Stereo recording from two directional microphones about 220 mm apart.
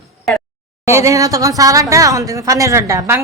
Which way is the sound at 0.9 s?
15° right (ahead or behind).